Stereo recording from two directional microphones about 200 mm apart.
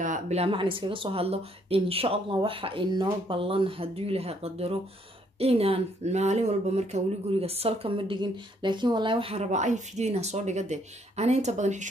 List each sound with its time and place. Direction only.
0.0 s speech: 35° right (ahead or behind)